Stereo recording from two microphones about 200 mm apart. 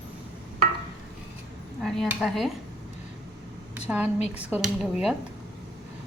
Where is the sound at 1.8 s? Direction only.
Centre (ahead or behind).